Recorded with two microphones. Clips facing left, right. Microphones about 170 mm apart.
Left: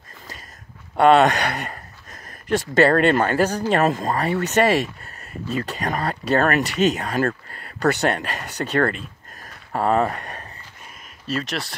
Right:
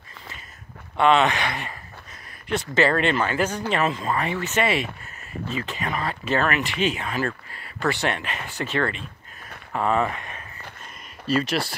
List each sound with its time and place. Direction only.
0.9 s speech: 45° left (ahead or behind)
11.2 s speech: centre (ahead or behind)